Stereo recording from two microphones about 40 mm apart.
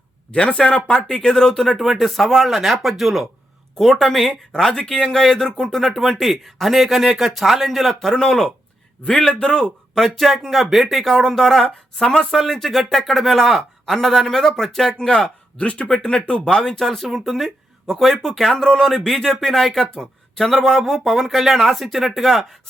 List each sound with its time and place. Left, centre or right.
0.3 s speech: left
1.6 s speech: centre
3.8 s speech: centre
4.5 s speech: centre
9.4 s speech: left
9.9 s speech: centre
14.9 s speech: centre
15.6 s speech: left; by 19.9 s centre
20.0 s a sound: centre
20.5 s speech: centre